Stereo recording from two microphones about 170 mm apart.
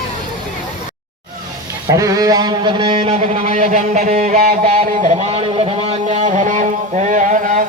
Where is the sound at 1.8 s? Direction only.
20° right (ahead or behind).